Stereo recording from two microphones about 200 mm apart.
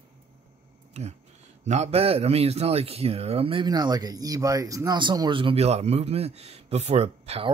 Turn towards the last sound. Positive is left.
turn(degrees=-30)  # may be behind; listen again after turning